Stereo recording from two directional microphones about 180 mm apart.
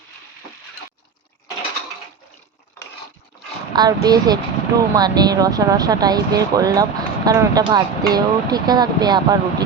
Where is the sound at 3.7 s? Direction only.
20° right (ahead or behind).